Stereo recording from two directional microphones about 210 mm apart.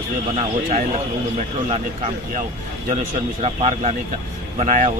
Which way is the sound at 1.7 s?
35° right (ahead or behind).